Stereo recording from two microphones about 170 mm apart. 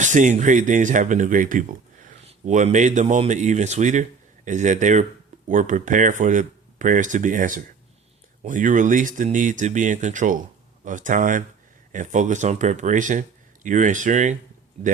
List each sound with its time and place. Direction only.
0.0 s speech: 45° right (ahead or behind)